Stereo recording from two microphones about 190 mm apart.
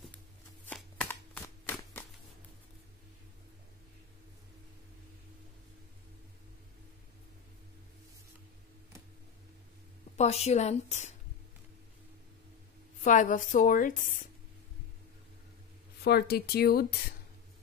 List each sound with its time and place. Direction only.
0.7 s shuffling cards: 10° left (ahead or behind)
10.1 s a woman's voice: 35° left (ahead or behind)
13.0 s a woman's voice: 40° left (ahead or behind)
16.0 s speech: 60° left (ahead or behind)